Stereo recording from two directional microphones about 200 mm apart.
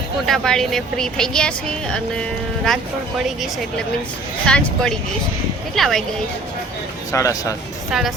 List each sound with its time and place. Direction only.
0.3 s speech: centre (ahead or behind)
4.4 s speech: 5° left (ahead or behind)
7.1 s speech: 15° left (ahead or behind)
7.9 s a woman's voice: centre (ahead or behind)